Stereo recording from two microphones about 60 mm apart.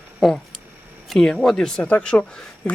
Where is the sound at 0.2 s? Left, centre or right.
Centre.